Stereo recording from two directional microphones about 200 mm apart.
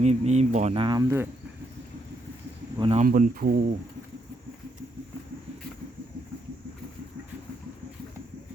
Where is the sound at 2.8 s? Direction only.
25° right (ahead or behind).